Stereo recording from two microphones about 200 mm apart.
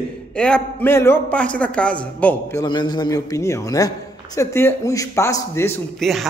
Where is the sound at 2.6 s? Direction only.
20° left (ahead or behind).